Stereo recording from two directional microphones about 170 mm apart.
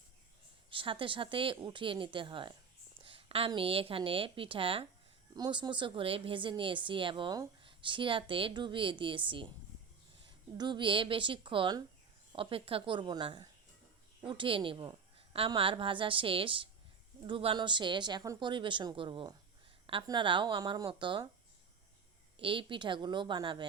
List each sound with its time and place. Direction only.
0.7 s a woman's voice: 30° right (ahead or behind)
10.6 s a woman's voice: 25° right (ahead or behind)
22.4 s a woman's voice: 30° right (ahead or behind)